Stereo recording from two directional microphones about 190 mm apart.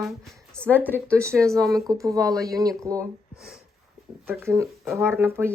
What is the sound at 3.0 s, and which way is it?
Speech, centre (ahead or behind).